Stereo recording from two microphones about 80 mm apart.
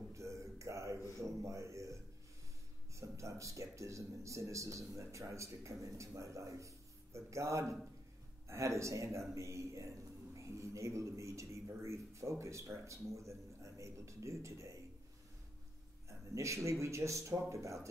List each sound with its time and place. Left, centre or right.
0.1 s a sound: right
1.4 s a man's voice: right
3.0 s a man's voice: right
16.1 s a man's voice: right